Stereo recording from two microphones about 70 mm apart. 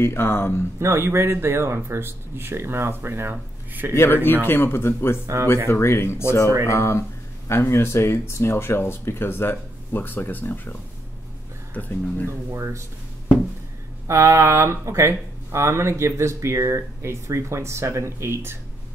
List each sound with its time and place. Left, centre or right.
0.0 s speech: left
0.7 s speech: right
3.9 s speech: left
12.3 s speech: right
14.0 s a sound: right
14.9 s speech: right